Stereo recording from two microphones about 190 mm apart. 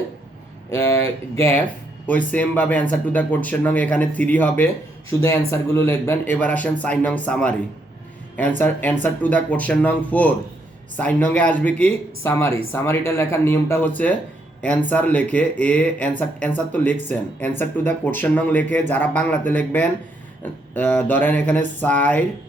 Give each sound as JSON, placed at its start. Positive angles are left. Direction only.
{"t": 0.7, "sound": "speech", "side_deg": 15}